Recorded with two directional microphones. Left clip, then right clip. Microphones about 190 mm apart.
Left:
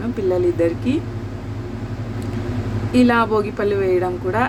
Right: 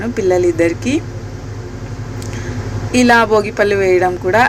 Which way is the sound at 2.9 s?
10° right (ahead or behind).